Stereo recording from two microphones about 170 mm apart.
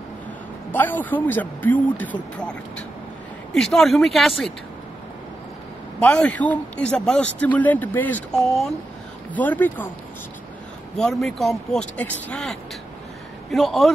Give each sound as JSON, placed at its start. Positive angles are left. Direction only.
{"t": 0.7, "sound": "speech", "side_deg": 10}
{"t": 3.5, "sound": "speech", "side_deg": 5}
{"t": 5.9, "sound": "speech", "side_deg": 5}
{"t": 11.0, "sound": "speech", "side_deg": 0}